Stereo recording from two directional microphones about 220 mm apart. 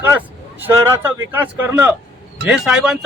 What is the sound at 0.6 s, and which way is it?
Speech, 10° right (ahead or behind).